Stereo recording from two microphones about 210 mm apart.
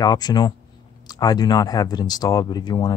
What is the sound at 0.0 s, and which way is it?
Speech, 20° left (ahead or behind).